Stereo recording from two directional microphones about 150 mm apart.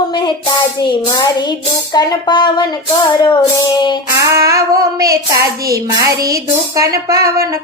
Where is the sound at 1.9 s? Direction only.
25° left (ahead or behind).